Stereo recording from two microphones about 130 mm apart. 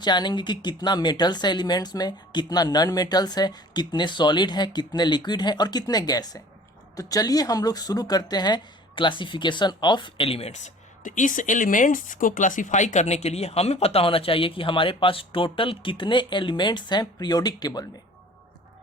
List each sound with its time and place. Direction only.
0.0 s speech: 35° left (ahead or behind)